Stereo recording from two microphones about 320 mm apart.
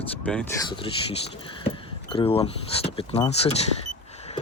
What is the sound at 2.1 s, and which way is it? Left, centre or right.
Speech, centre.